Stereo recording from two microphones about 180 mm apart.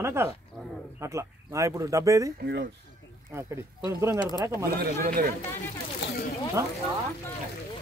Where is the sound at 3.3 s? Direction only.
15° right (ahead or behind).